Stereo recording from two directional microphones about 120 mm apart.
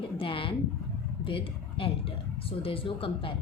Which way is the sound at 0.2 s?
45° left (ahead or behind).